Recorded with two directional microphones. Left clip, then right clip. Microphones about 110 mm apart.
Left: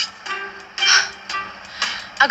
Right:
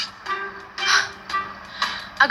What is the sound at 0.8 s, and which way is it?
Music, 25° left (ahead or behind).